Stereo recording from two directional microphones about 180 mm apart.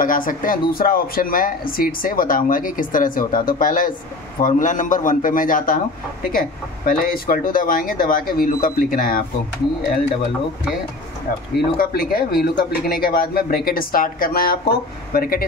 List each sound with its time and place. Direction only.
0.0 s speech: 50° left (ahead or behind)
6.9 s speech: 50° left (ahead or behind)
11.5 s speech: 60° left (ahead or behind)